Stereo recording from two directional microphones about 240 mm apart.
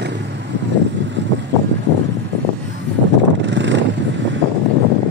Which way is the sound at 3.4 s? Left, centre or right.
Right.